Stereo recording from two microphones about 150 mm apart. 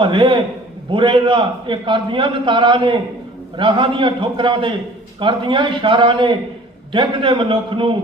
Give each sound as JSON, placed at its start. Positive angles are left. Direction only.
{"t": 0.0, "sound": "a man's voice", "side_deg": -35}